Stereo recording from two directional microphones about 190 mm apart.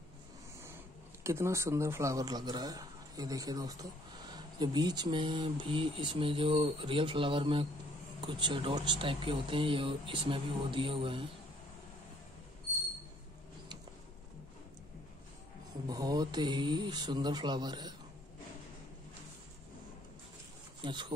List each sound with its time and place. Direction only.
1.2 s speech: 15° right (ahead or behind)
15.9 s speech: 20° right (ahead or behind)
20.8 s speech: 25° right (ahead or behind)